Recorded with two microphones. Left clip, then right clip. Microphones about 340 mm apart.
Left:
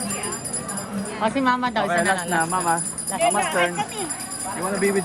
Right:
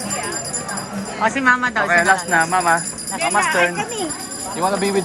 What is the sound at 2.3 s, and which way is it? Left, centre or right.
Speech, centre.